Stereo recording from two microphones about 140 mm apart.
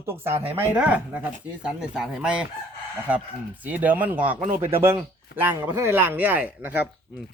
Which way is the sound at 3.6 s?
10° right (ahead or behind).